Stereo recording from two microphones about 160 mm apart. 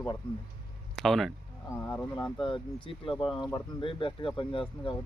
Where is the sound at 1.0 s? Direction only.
Centre (ahead or behind).